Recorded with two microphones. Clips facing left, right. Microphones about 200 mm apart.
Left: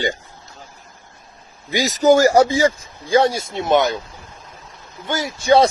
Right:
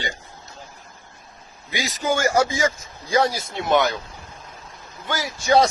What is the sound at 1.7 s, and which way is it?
Speech, 40° left (ahead or behind).